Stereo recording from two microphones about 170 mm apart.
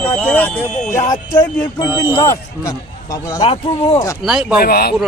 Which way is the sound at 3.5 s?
35° left (ahead or behind).